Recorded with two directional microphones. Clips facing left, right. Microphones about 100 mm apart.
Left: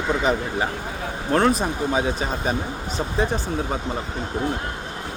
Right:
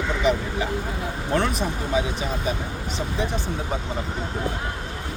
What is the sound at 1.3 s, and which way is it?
Speech, 40° left (ahead or behind).